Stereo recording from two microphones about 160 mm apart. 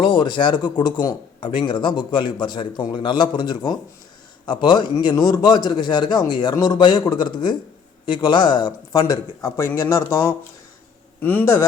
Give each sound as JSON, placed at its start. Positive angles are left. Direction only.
{"t": 0.0, "sound": "a man's voice", "side_deg": 30}